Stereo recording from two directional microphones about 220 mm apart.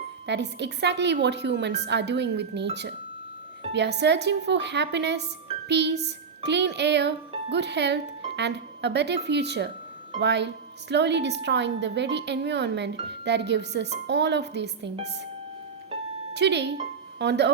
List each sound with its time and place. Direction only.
0.3 s a woman's voice: 50° right (ahead or behind)
3.7 s a woman's voice: 50° right (ahead or behind)
16.3 s a woman's voice: 50° right (ahead or behind)